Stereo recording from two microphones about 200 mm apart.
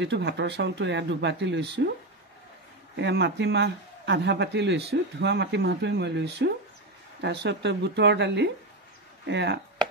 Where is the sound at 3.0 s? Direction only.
60° right (ahead or behind).